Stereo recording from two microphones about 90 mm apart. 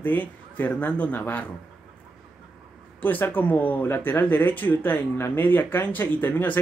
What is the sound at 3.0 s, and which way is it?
Speech, 20° left (ahead or behind).